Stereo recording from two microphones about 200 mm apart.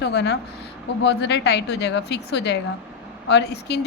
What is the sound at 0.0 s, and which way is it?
Speech, 55° left (ahead or behind).